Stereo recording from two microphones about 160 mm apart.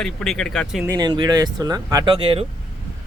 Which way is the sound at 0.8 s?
20° right (ahead or behind).